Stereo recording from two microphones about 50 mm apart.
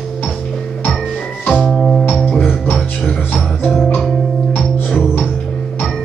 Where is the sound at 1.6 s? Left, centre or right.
Centre.